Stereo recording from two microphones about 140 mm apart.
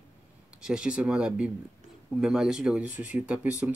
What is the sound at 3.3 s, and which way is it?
Speech, 10° right (ahead or behind).